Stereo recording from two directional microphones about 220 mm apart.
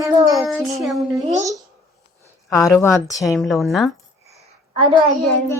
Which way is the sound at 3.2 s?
Centre (ahead or behind).